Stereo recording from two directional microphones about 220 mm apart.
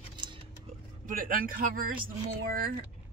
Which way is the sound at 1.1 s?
40° right (ahead or behind).